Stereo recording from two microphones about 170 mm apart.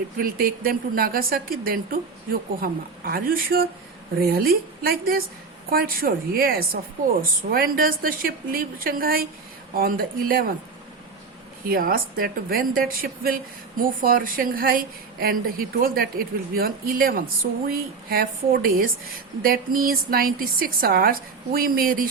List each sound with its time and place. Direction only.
0.2 s a woman's voice: 60° right (ahead or behind)
11.7 s a woman's voice: 60° right (ahead or behind)